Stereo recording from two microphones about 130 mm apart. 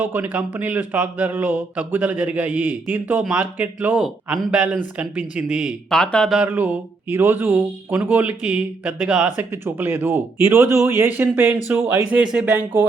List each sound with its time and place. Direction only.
0.0 s speech: 15° right (ahead or behind)
5.9 s speech: 5° left (ahead or behind)
6.4 s speech: 15° right (ahead or behind)
9.4 s speech: 15° right (ahead or behind)